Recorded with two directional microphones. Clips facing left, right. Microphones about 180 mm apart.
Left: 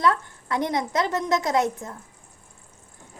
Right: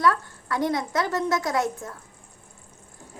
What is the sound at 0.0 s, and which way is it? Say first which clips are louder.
A woman's voice: even; 20° left (ahead or behind).